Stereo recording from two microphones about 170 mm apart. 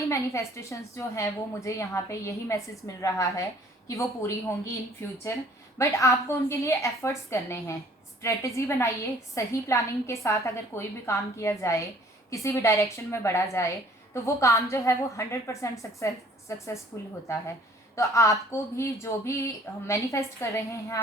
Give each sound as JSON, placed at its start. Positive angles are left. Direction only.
{"t": 0.1, "sound": "a woman's voice", "side_deg": 15}